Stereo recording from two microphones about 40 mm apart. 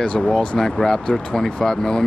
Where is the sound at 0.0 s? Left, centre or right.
Left.